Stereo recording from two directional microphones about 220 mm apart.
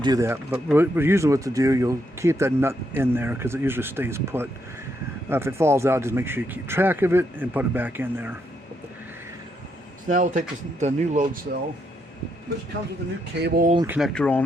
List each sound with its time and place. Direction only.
0.0 s speech: 15° right (ahead or behind)
10.1 s speech: 35° right (ahead or behind)
13.4 s speech: 45° right (ahead or behind)
13.8 s speech: 5° right (ahead or behind)
14.1 s speech: 5° left (ahead or behind)